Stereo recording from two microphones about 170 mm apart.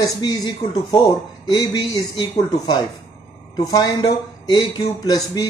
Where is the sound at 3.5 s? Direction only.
25° left (ahead or behind).